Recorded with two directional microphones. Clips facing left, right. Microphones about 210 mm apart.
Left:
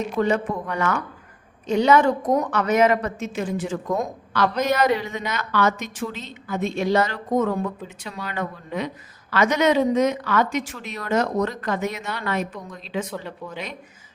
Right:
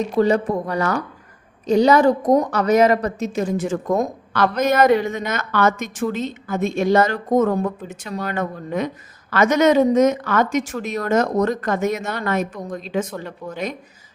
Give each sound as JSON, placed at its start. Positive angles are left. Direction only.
{"t": 0.2, "sound": "a woman's voice", "side_deg": -35}